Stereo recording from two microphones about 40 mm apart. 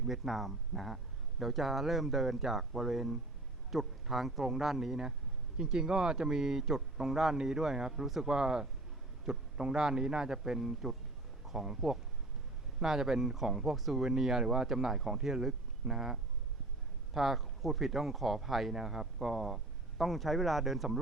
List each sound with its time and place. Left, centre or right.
0.0 s speech: centre
17.2 s speech: centre